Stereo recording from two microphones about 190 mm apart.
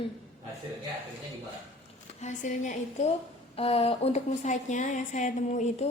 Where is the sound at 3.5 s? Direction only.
30° left (ahead or behind).